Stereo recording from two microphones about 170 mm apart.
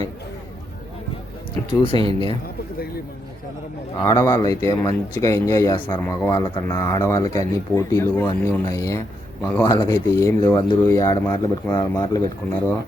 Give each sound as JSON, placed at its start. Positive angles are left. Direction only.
{"t": 1.8, "sound": "speech", "side_deg": 30}
{"t": 4.0, "sound": "speech", "side_deg": 20}
{"t": 12.4, "sound": "speech", "side_deg": 10}